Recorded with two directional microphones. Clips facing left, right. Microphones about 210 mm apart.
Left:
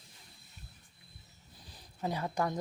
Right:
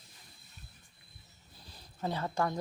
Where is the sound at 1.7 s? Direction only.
15° left (ahead or behind).